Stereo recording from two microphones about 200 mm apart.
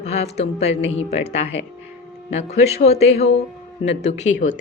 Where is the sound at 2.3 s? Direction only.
30° left (ahead or behind).